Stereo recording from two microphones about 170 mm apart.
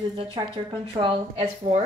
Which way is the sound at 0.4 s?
30° right (ahead or behind).